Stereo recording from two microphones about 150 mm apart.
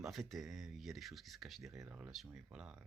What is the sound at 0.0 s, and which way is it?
Speech, centre (ahead or behind).